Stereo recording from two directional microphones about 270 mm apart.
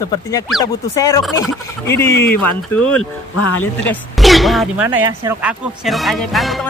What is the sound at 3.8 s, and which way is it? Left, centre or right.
Speech, centre.